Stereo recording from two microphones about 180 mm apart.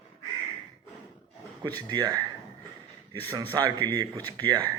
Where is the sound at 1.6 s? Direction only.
25° right (ahead or behind).